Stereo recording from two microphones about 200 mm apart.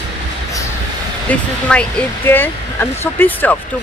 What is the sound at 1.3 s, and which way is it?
Speech, 5° left (ahead or behind).